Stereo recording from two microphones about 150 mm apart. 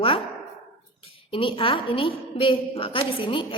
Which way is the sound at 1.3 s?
35° left (ahead or behind).